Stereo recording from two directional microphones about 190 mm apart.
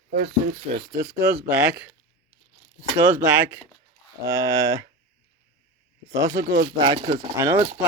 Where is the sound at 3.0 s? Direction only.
10° right (ahead or behind).